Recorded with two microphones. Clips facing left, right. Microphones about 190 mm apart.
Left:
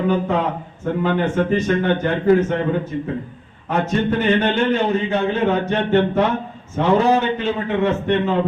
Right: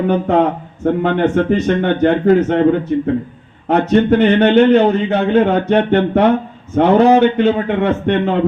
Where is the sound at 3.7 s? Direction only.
65° right (ahead or behind).